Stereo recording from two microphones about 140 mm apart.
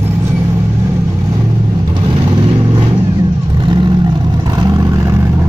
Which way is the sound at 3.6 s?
35° right (ahead or behind).